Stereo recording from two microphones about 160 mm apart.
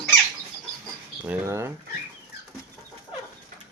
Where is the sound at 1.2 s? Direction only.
15° right (ahead or behind).